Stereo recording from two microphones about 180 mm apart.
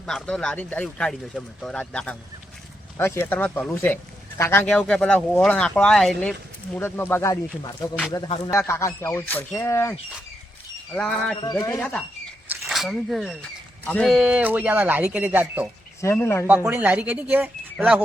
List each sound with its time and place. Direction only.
0.0 s speech: 5° left (ahead or behind)
10.9 s speech: 5° left (ahead or behind)
11.5 s speech: 20° left (ahead or behind)
11.8 s speech: 5° left (ahead or behind)
12.5 s a sound: centre (ahead or behind)
13.8 s speech: 5° left (ahead or behind)
16.0 s speech: 15° left (ahead or behind)
16.6 s speech: 10° right (ahead or behind)